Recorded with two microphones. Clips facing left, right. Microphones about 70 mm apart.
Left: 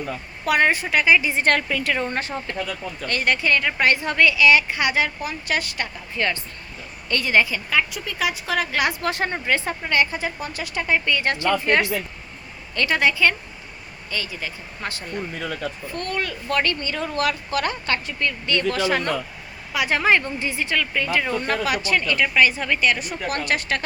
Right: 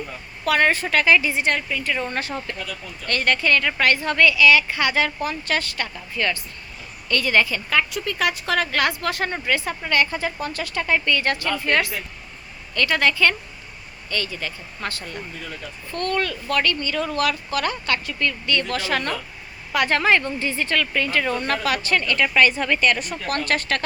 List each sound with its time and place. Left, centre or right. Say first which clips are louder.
0.4 s speech: even; centre
1.5 s a woman's voice: left 2 dB; left
2.0 s a woman's voice: left 1 dB; left
3.1 s a woman's voice: right 1 dB; centre
7.7 s a woman's voice: right 1 dB; centre
9.0 s a woman's voice: left 1 dB; left
19.7 s speech: right 1 dB; centre